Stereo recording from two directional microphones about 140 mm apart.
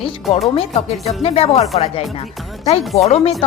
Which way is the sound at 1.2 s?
45° left (ahead or behind).